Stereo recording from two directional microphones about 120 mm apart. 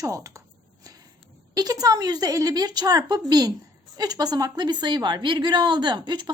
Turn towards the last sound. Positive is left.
turn(degrees=-40)  # may be behind; listen again after turning